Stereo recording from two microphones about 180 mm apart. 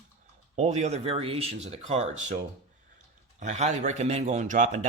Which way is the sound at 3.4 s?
40° right (ahead or behind).